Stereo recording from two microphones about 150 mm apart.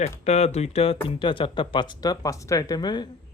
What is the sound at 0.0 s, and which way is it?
Speech, 45° left (ahead or behind).